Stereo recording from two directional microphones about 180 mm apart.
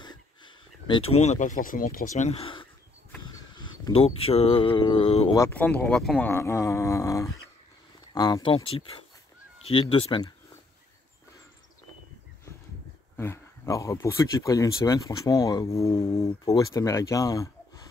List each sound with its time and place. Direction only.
0.0 s speech: 25° left (ahead or behind)
3.9 s speech: 35° left (ahead or behind)
5.3 s speech: 15° left (ahead or behind)
13.1 s speech: 15° left (ahead or behind)